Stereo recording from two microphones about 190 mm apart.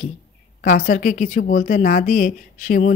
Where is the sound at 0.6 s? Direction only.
45° left (ahead or behind).